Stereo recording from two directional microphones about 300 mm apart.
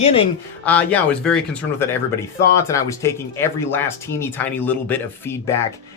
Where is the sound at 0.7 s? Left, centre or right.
Centre.